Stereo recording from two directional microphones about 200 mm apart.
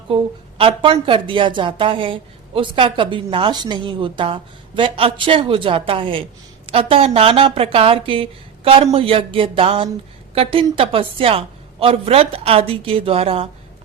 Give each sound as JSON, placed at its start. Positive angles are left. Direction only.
{"t": 0.6, "sound": "a woman's voice", "side_deg": -25}